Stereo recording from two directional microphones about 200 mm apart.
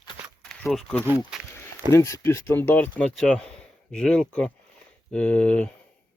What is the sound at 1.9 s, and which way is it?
Speech, 15° left (ahead or behind).